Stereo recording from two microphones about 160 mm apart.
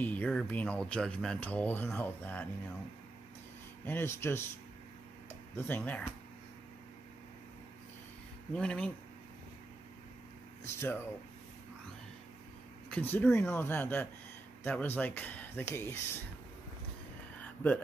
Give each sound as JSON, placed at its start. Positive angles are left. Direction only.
{"t": 0.0, "sound": "speech", "side_deg": 10}
{"t": 3.8, "sound": "speech", "side_deg": 15}
{"t": 5.6, "sound": "speech", "side_deg": 15}
{"t": 8.5, "sound": "speech", "side_deg": 5}
{"t": 10.6, "sound": "speech", "side_deg": 15}
{"t": 12.9, "sound": "speech", "side_deg": 10}
{"t": 17.4, "sound": "a sound", "side_deg": 10}